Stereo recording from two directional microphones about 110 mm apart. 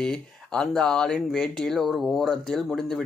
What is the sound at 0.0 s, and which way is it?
Speech, 5° left (ahead or behind).